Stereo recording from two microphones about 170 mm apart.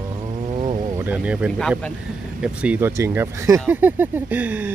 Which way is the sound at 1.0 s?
10° right (ahead or behind).